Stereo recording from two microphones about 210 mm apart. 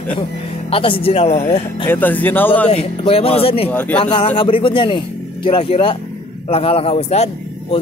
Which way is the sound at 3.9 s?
30° left (ahead or behind).